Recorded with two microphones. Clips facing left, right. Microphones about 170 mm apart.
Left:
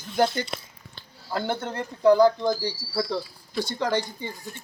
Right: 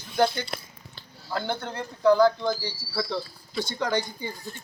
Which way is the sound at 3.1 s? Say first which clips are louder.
Left 2 dB; 10° left (ahead or behind).